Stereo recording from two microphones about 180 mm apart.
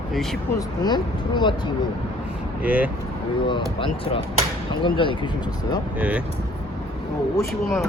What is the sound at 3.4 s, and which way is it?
Speech, 25° left (ahead or behind).